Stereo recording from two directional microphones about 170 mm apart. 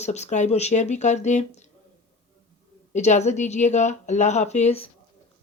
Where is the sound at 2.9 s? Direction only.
45° left (ahead or behind).